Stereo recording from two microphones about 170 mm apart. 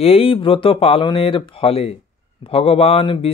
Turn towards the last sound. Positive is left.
turn(degrees=30)  # may be behind; listen again after turning